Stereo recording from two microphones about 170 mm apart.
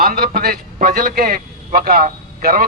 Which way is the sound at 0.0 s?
60° right (ahead or behind).